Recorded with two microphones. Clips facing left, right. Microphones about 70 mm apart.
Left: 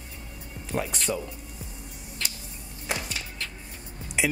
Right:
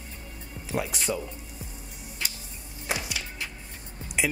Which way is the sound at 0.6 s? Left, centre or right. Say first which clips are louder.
Even; centre.